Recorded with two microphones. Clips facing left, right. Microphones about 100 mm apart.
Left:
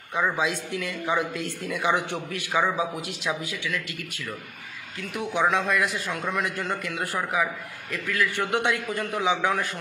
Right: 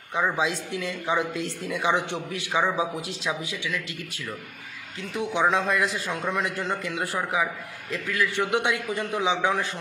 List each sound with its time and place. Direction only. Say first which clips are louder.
0.4 s speech: even; 25° right (ahead or behind)
5.1 s speech: right 1 dB; 25° right (ahead or behind)